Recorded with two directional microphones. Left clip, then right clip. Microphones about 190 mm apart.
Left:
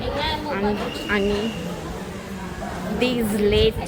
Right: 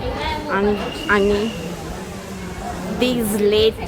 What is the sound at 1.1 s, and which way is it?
Speech, 25° right (ahead or behind).